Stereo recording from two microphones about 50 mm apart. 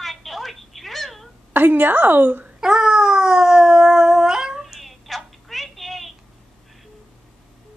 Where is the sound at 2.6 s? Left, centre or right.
Centre.